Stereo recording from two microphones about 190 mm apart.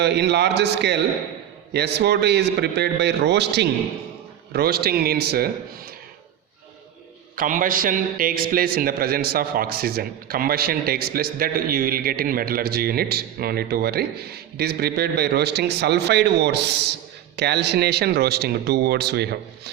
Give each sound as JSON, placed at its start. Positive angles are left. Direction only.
{"t": 0.0, "sound": "a man's voice", "side_deg": -60}
{"t": 7.3, "sound": "a man's voice", "side_deg": -45}